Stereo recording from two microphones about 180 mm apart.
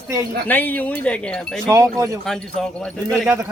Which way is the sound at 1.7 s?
15° right (ahead or behind).